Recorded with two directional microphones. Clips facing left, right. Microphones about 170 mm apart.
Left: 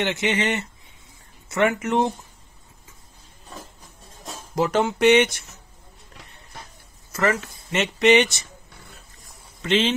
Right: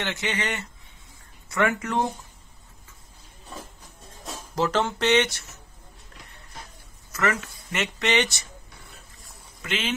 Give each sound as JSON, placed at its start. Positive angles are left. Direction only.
{"t": 0.0, "sound": "speech", "side_deg": 20}
{"t": 4.6, "sound": "speech", "side_deg": 10}
{"t": 7.1, "sound": "speech", "side_deg": 30}
{"t": 9.6, "sound": "speech", "side_deg": 30}